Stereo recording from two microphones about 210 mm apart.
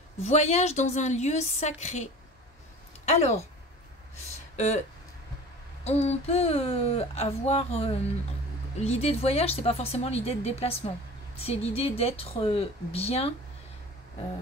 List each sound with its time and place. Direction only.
0.2 s a woman's voice: 30° left (ahead or behind)
3.1 s speech: 30° left (ahead or behind)
4.6 s a woman's voice: 35° left (ahead or behind)
5.9 s speech: 30° left (ahead or behind)